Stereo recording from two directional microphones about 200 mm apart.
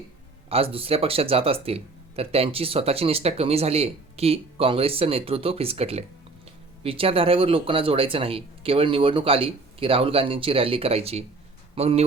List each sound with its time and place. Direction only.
0.5 s speech: 30° right (ahead or behind)